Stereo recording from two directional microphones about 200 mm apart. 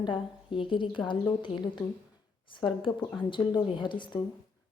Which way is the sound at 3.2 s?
25° left (ahead or behind).